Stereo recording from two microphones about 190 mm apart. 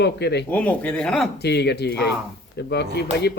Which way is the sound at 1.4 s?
60° left (ahead or behind).